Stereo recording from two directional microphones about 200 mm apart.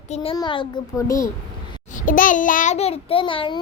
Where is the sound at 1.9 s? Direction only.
40° left (ahead or behind); by 3.6 s 25° left (ahead or behind).